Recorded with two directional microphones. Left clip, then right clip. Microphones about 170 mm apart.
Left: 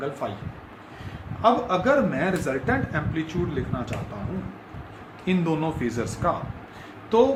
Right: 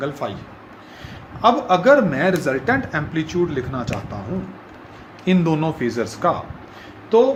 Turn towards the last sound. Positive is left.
turn(degrees=-15)  # may be behind; listen again after turning